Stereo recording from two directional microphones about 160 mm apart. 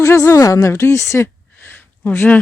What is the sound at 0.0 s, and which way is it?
A woman's voice, 20° left (ahead or behind).